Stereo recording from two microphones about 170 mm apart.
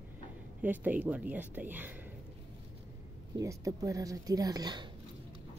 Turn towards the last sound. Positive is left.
turn(degrees=-25)  # may be behind; listen again after turning